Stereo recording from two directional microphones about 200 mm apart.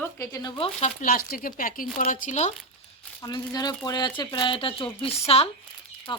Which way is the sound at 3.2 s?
20° left (ahead or behind).